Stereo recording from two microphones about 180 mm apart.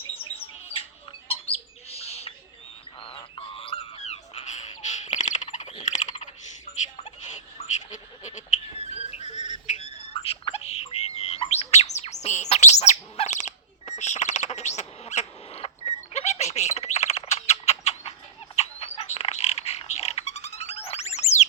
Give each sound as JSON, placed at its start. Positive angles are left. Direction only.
{"t": 0.2, "sound": "bird", "side_deg": 30}
{"t": 3.0, "sound": "music", "side_deg": 30}
{"t": 6.9, "sound": "goat", "side_deg": 40}
{"t": 18.5, "sound": "bird", "side_deg": 35}